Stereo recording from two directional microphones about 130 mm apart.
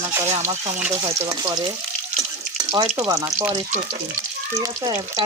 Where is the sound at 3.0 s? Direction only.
30° right (ahead or behind).